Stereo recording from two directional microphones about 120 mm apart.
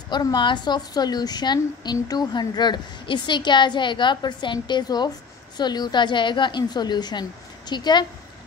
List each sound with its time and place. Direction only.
0.1 s a woman's voice: 35° left (ahead or behind)